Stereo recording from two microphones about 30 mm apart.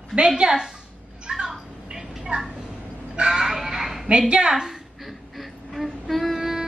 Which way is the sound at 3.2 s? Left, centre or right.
Centre.